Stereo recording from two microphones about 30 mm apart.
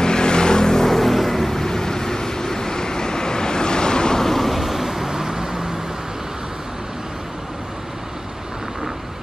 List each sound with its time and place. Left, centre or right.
0.0 s vehicle: left
4.2 s vehicle: centre